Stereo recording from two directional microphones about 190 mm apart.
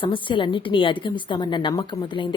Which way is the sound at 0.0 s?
25° left (ahead or behind).